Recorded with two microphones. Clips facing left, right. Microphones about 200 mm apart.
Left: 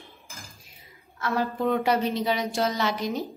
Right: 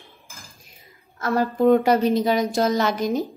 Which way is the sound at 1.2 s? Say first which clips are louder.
Right 6 dB; 45° right (ahead or behind).